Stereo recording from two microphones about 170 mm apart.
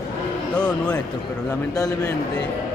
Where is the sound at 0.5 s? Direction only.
5° left (ahead or behind).